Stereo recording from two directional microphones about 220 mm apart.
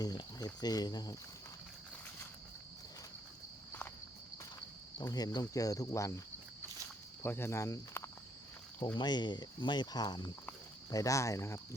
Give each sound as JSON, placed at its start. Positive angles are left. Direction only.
{"t": 0.0, "sound": "speech", "side_deg": 20}
{"t": 4.9, "sound": "speech", "side_deg": 15}
{"t": 7.2, "sound": "speech", "side_deg": 10}